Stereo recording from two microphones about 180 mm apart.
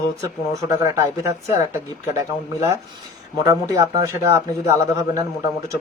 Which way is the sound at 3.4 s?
20° right (ahead or behind).